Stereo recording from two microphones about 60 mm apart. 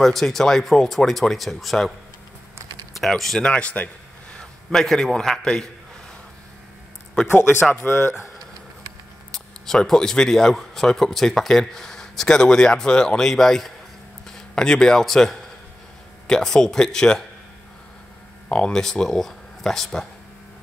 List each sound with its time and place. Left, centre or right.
0.0 s speech: centre
3.0 s speech: centre; by 4.4 s left
4.6 s speech: centre
7.2 s speech: left
9.7 s speech: centre
18.5 s speech: centre